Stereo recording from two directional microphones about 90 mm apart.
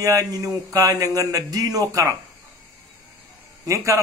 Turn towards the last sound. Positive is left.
turn(degrees=-35)  # may be behind; listen again after turning